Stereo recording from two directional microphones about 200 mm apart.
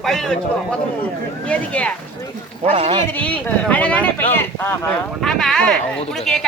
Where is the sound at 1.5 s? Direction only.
5° left (ahead or behind).